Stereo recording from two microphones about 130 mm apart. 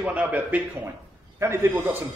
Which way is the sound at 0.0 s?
10° right (ahead or behind).